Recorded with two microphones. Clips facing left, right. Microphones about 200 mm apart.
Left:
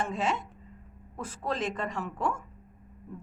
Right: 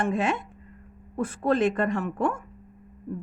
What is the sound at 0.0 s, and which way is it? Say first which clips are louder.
A woman's voice: right 5 dB; 60° right (ahead or behind).